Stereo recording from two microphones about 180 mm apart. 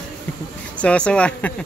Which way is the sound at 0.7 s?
5° left (ahead or behind).